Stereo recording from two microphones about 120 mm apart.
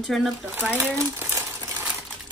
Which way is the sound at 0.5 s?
15° right (ahead or behind).